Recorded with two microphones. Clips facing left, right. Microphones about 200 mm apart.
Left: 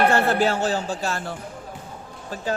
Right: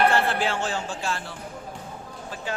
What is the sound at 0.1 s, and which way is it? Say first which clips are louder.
A man's voice: left 4 dB; 45° left (ahead or behind).